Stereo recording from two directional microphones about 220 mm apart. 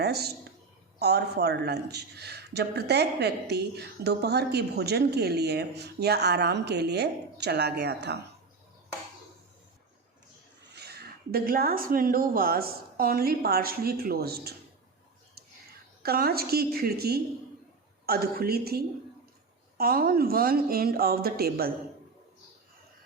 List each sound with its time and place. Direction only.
0.0 s speech: 45° right (ahead or behind)
10.8 s speech: 45° right (ahead or behind)
16.0 s speech: 45° right (ahead or behind)